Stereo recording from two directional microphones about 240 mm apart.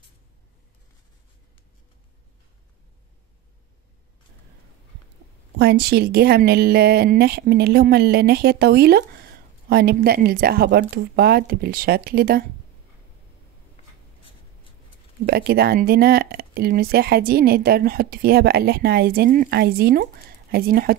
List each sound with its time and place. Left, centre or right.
5.6 s speech: right
13.8 s writing: left
15.2 s speech: right